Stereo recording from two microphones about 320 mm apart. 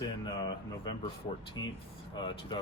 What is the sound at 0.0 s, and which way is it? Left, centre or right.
Speech, centre.